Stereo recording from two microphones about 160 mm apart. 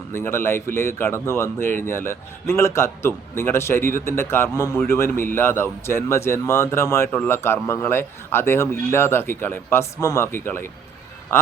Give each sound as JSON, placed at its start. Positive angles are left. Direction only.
{"t": 0.1, "sound": "a man's voice", "side_deg": 15}